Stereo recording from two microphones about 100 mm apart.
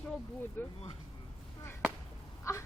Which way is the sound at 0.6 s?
20° left (ahead or behind).